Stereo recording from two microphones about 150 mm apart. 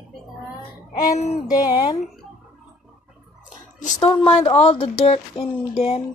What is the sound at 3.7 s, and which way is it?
Speech, 55° left (ahead or behind).